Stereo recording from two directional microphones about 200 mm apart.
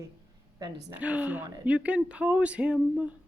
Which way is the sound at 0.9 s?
5° right (ahead or behind).